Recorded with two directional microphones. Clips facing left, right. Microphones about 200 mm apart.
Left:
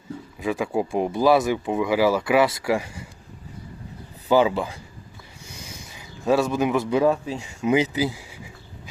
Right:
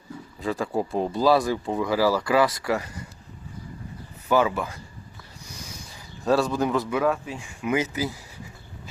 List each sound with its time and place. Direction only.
0.3 s speech: 15° left (ahead or behind)
4.3 s speech: 25° left (ahead or behind)
6.2 s speech: 20° left (ahead or behind)